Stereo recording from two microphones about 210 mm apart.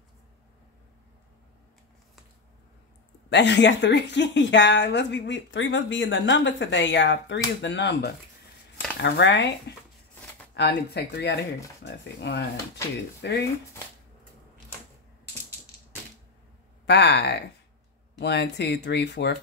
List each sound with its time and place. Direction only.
3.3 s speech: 55° left (ahead or behind)
16.8 s speech: 55° left (ahead or behind)